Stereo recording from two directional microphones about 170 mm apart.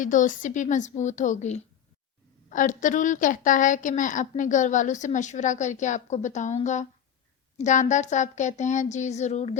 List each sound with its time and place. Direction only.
0.0 s a woman's voice: 50° left (ahead or behind)